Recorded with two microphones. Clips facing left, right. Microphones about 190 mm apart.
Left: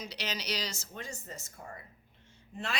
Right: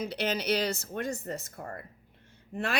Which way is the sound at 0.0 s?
55° right (ahead or behind).